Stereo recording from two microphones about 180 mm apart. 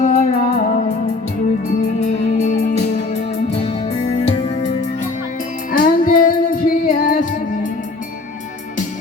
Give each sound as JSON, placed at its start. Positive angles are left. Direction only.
{"t": 0.0, "sound": "music", "side_deg": 40}
{"t": 2.0, "sound": "music", "side_deg": 40}
{"t": 5.7, "sound": "music", "side_deg": 50}